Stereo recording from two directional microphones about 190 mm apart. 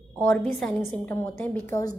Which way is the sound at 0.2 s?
5° left (ahead or behind).